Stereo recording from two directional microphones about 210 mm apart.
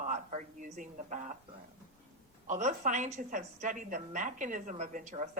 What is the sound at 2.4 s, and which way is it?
Speech, 35° right (ahead or behind).